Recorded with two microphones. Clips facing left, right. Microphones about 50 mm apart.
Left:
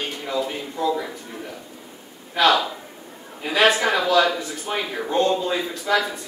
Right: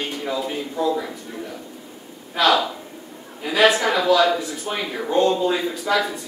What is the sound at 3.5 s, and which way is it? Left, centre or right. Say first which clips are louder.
Speech: right 1 dB; left.